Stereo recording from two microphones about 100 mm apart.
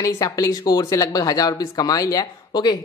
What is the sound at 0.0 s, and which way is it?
Speech, 35° left (ahead or behind).